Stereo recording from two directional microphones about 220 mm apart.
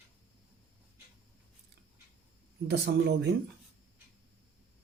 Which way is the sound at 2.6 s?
50° right (ahead or behind).